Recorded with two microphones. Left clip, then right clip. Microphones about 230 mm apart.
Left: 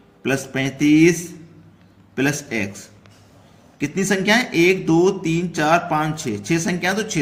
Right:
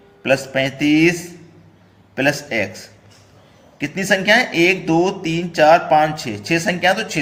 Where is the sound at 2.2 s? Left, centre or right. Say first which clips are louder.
Right 4 dB; left.